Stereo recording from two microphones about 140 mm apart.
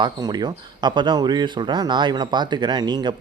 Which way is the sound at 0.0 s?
30° right (ahead or behind).